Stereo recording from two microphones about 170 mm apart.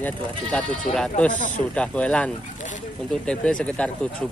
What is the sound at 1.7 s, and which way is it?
Speech, 5° left (ahead or behind).